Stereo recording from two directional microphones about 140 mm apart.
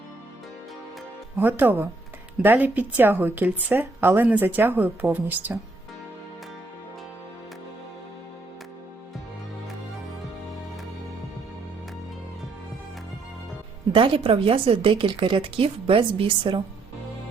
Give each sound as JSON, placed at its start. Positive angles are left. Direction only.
{"t": 1.4, "sound": "speech", "side_deg": -15}
{"t": 13.9, "sound": "speech", "side_deg": -40}